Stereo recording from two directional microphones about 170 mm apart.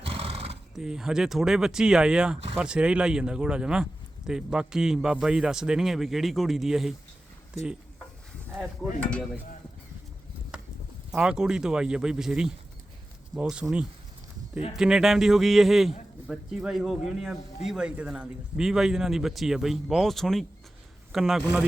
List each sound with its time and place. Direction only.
0.0 s horse: 35° right (ahead or behind)
0.8 s speech: 5° right (ahead or behind)
11.1 s a man's voice: 5° right (ahead or behind)